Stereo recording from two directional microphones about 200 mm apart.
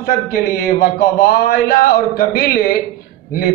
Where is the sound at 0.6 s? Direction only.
50° left (ahead or behind).